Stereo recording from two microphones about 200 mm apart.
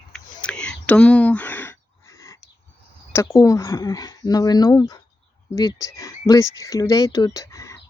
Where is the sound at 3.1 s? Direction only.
15° left (ahead or behind).